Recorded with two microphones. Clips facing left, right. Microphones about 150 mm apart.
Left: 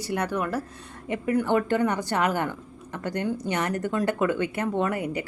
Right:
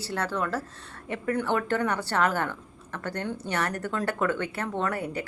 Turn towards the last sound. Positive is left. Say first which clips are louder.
# left 3 dB
turn(degrees=15)  # may be behind; listen again after turning